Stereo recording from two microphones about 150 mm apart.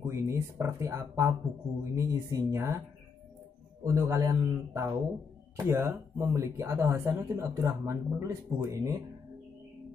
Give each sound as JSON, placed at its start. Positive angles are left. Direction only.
{"t": 0.0, "sound": "speech", "side_deg": -20}
{"t": 3.8, "sound": "speech", "side_deg": -20}